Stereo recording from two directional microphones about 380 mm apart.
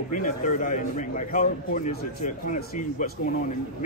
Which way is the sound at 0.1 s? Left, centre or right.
Centre.